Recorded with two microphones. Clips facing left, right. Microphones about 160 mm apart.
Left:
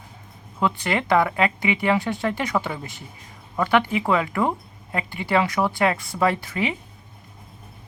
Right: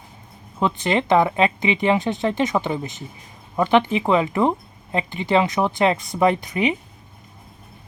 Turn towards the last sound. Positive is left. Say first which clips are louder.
# right 4 dB
turn(degrees=-20)  # may be behind; listen again after turning